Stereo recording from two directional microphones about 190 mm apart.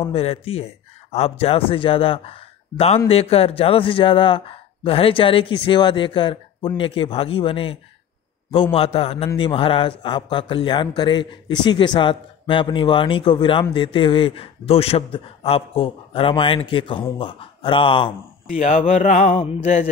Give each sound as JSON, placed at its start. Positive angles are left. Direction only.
{"t": 0.1, "sound": "a man's voice", "side_deg": 30}
{"t": 8.7, "sound": "mantra", "side_deg": 30}
{"t": 9.4, "sound": "a man's voice", "side_deg": 30}
{"t": 18.6, "sound": "mantra", "side_deg": 35}